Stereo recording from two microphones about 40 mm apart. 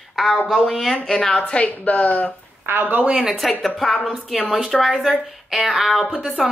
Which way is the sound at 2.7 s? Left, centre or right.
Right.